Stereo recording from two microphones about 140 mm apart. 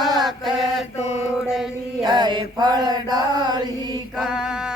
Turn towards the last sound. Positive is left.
turn(degrees=-5)  # may be behind; listen again after turning